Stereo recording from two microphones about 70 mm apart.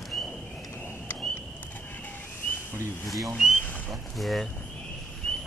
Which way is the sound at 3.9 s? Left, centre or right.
Centre.